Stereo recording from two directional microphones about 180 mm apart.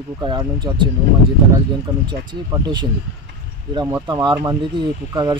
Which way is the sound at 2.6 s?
25° right (ahead or behind).